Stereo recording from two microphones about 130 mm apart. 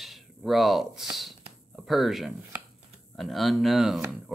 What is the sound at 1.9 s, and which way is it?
Speech, centre (ahead or behind).